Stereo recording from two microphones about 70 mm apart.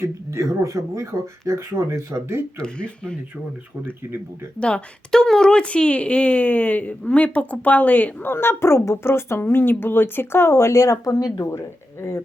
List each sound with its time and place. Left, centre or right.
0.0 s speech: right
2.6 s speech: centre
4.0 s speech: right
4.6 s a woman's voice: centre; by 12.2 s left